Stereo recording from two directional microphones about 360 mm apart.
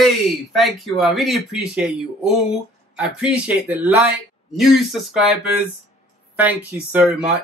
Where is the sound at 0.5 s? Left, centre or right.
Centre.